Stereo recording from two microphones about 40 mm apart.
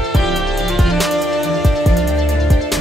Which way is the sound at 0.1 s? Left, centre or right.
Centre.